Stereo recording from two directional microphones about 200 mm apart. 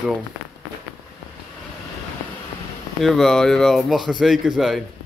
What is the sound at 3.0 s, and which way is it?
Speech, centre (ahead or behind).